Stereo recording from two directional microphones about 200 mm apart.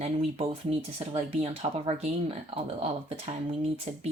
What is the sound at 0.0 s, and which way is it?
Speech, 30° right (ahead or behind).